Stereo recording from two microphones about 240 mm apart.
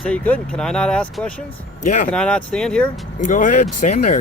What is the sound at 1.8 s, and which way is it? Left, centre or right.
Speech, left.